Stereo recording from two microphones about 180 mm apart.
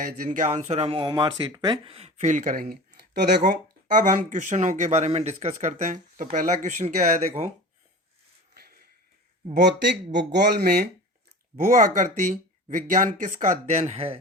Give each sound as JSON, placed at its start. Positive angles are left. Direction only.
{"t": 0.3, "sound": "speech", "side_deg": -40}
{"t": 3.9, "sound": "speech", "side_deg": -45}
{"t": 9.6, "sound": "speech", "side_deg": -75}
{"t": 11.7, "sound": "speech", "side_deg": -50}